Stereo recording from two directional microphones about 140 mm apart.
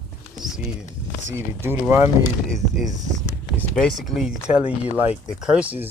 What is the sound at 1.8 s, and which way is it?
Speech, 15° right (ahead or behind).